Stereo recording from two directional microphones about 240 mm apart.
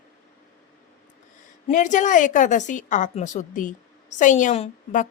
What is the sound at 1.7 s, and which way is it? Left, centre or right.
A woman's voice, left.